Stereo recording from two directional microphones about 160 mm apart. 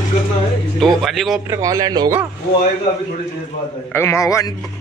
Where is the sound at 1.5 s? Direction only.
20° right (ahead or behind).